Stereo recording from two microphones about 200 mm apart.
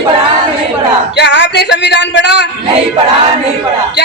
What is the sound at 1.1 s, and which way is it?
A woman's voice, 60° left (ahead or behind).